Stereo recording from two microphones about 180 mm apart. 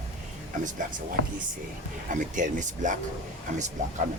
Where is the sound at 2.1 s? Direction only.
45° right (ahead or behind).